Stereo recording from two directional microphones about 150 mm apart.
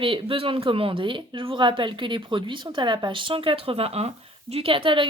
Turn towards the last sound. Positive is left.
turn(degrees=-35)  # may be behind; listen again after turning